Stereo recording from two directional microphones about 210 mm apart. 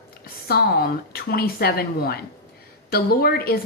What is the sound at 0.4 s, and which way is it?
A woman's voice, 45° left (ahead or behind).